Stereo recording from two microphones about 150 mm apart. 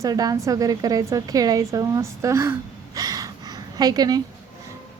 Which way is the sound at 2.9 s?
25° right (ahead or behind).